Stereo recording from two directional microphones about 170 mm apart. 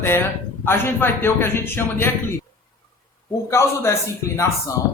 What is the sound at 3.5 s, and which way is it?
A woman's voice, 15° left (ahead or behind).